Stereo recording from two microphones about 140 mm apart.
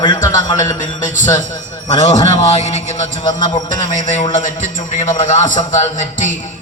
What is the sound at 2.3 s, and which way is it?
A man's voice, 50° left (ahead or behind).